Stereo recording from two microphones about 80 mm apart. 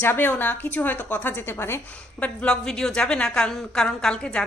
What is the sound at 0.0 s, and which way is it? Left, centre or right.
A woman's voice, left.